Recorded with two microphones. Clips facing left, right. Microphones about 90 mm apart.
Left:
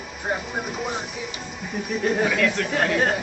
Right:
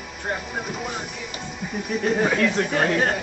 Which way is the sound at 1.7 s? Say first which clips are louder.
Even; centre (ahead or behind).